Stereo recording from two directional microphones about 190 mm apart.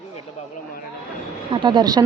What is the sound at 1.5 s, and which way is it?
Speech, 25° right (ahead or behind).